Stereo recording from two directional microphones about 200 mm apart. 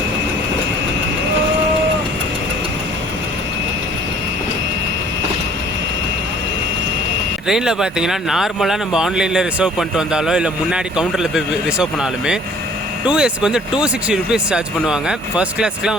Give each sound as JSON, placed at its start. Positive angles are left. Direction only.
{"t": 7.4, "sound": "speech", "side_deg": 0}